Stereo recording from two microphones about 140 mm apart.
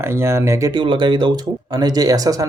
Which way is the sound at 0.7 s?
35° right (ahead or behind).